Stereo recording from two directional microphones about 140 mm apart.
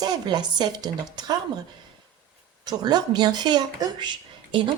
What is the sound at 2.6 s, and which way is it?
Speech, 30° right (ahead or behind).